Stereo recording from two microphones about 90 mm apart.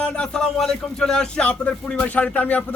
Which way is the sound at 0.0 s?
10° left (ahead or behind).